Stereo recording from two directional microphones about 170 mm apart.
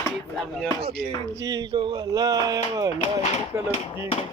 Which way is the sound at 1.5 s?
25° right (ahead or behind).